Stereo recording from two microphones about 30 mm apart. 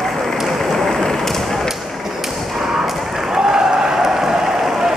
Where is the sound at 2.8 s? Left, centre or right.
Centre.